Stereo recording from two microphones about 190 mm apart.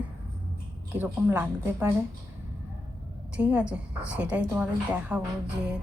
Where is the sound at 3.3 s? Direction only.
5° right (ahead or behind).